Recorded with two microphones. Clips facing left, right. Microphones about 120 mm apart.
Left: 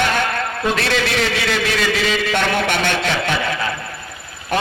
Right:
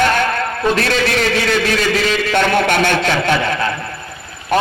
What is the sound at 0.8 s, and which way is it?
A man's voice, 45° right (ahead or behind).